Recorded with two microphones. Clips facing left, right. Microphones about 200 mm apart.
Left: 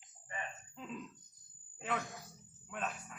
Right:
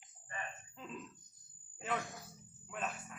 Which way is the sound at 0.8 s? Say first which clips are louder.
Left 3 dB; centre (ahead or behind).